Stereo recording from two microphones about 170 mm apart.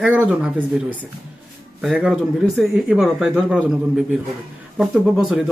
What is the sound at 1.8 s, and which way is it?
Speech, centre (ahead or behind).